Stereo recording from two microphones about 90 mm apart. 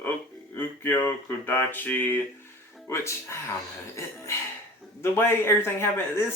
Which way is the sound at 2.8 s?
30° left (ahead or behind).